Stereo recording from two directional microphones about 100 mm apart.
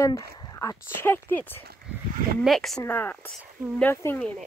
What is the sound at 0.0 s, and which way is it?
Speech, 35° left (ahead or behind).